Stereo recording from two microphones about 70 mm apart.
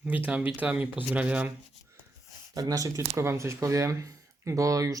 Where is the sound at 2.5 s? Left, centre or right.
Right.